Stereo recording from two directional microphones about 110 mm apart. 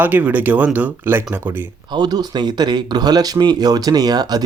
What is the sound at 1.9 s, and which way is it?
Speech, 40° right (ahead or behind).